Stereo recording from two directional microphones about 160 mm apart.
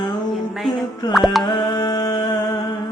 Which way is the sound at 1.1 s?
Centre (ahead or behind).